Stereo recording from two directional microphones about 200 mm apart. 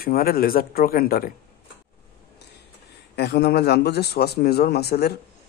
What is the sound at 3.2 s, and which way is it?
Speech, 55° left (ahead or behind).